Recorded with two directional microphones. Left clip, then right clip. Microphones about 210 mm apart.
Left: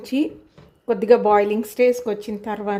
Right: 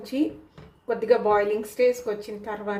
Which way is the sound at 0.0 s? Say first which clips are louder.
Left 3 dB; 45° left (ahead or behind).